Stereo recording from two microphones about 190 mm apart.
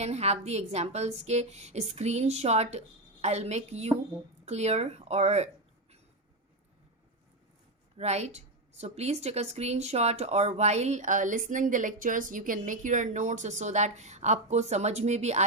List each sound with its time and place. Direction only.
0.0 s a woman's voice: 35° right (ahead or behind)
7.9 s a woman's voice: 35° right (ahead or behind)